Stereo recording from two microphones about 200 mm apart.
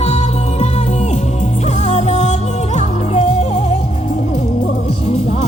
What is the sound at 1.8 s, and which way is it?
Music, 35° left (ahead or behind).